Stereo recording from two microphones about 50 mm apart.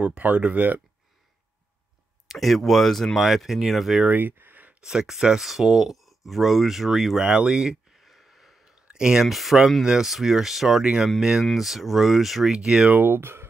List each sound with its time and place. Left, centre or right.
0.0 s speech: right
2.2 s speech: centre
3.2 s speech: centre
4.1 s a sound: right
4.8 s speech: centre
8.7 s a sound: centre
9.2 s speech: centre
12.5 s speech: centre
12.9 s speech: right